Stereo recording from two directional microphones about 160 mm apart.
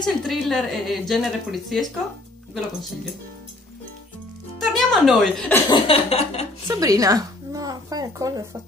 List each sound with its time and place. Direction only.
0.2 s a woman's voice: centre (ahead or behind)
4.6 s a woman's voice: centre (ahead or behind)
5.7 s a sound: 35° left (ahead or behind)
6.7 s a woman's voice: 20° right (ahead or behind)